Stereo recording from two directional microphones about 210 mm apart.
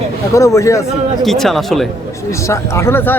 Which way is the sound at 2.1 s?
15° left (ahead or behind).